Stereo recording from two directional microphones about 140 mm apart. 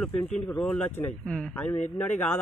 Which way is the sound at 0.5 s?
10° left (ahead or behind).